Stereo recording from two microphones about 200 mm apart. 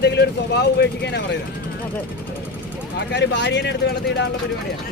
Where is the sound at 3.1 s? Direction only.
60° left (ahead or behind).